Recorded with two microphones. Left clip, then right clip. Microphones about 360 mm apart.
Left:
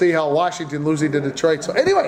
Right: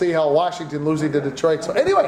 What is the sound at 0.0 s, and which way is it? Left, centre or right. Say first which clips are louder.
A man's voice: even; left.